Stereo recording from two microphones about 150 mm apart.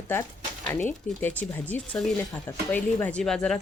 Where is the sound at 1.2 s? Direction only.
10° left (ahead or behind).